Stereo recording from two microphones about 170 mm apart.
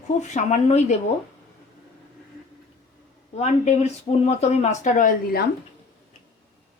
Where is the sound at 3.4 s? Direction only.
40° left (ahead or behind); by 5.4 s 55° left (ahead or behind).